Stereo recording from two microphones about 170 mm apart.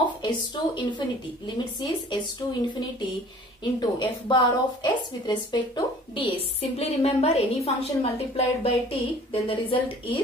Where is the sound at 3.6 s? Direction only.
25° left (ahead or behind).